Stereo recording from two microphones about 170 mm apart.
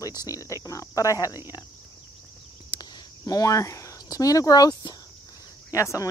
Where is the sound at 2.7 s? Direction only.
20° left (ahead or behind).